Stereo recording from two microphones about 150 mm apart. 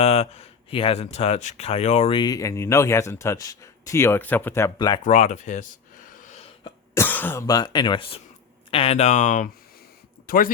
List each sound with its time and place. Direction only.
0.0 s speech: 45° left (ahead or behind)
2.1 s speech: 25° left (ahead or behind)
5.0 s speech: 55° left (ahead or behind)
6.2 s a sound: 45° left (ahead or behind)
6.9 s speech: 15° left (ahead or behind)
7.4 s speech: 25° left (ahead or behind); by 9.5 s 55° left (ahead or behind)
10.2 s speech: 70° left (ahead or behind)